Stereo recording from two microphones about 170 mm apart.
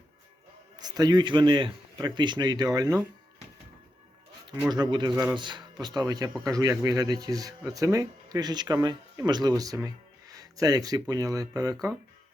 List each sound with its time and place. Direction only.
0.8 s speech: 25° right (ahead or behind)
4.7 s speech: 25° right (ahead or behind)